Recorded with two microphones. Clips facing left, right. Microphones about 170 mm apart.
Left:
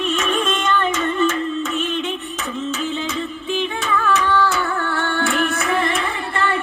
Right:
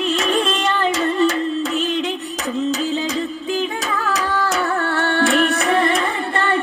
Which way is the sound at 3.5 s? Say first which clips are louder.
Left 2 dB; 40° right (ahead or behind).